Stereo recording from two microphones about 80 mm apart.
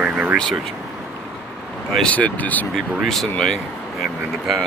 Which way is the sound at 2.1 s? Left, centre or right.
Centre.